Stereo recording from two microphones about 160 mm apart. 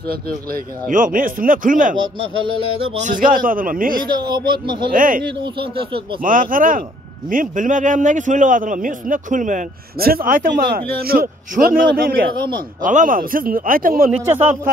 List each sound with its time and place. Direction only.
0.1 s a man's voice: 60° right (ahead or behind)
2.1 s a sound: 35° right (ahead or behind)
3.0 s a man's voice: 55° right (ahead or behind)
4.0 s speech: 25° right (ahead or behind)
4.9 s a man's voice: 60° right (ahead or behind)
5.4 s a sound: 35° right (ahead or behind)
6.2 s a man's voice: 60° right (ahead or behind)
12.8 s a man's voice: 55° right (ahead or behind)
14.2 s speech: 10° right (ahead or behind)